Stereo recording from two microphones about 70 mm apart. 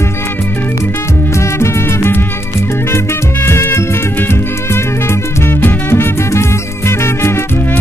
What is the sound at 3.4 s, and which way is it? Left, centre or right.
Music, left.